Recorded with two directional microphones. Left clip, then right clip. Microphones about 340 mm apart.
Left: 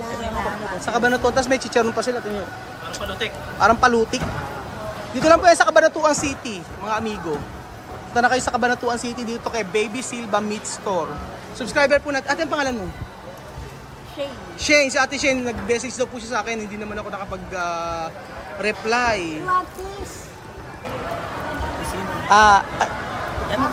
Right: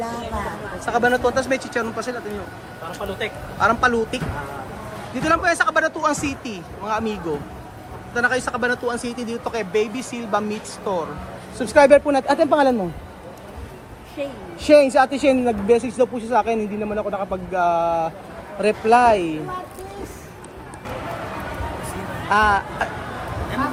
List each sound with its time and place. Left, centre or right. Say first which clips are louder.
0.9 s speech: right 1 dB; centre
3.2 s a man's voice: left 1 dB; centre
3.6 s speech: left 2 dB; centre
14.6 s speech: right 4 dB; centre
22.3 s speech: left 5 dB; centre